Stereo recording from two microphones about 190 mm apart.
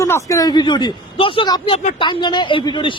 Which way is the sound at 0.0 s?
15° left (ahead or behind).